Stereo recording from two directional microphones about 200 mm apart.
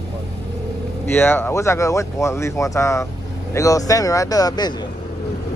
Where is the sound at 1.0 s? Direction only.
10° left (ahead or behind).